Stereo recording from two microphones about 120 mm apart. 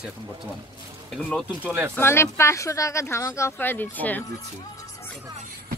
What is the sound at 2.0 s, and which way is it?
Speech, 20° left (ahead or behind).